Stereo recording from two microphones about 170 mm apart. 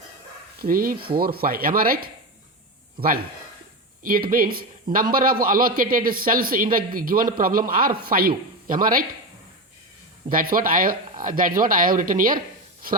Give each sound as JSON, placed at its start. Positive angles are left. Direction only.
{"t": 0.6, "sound": "a man's voice", "side_deg": -60}
{"t": 4.0, "sound": "a man's voice", "side_deg": -55}
{"t": 10.2, "sound": "a man's voice", "side_deg": -55}